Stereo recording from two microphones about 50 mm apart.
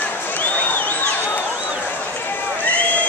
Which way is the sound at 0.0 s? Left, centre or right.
Left.